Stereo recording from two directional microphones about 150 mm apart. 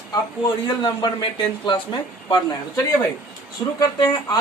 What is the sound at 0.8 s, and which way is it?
Speech, 30° left (ahead or behind).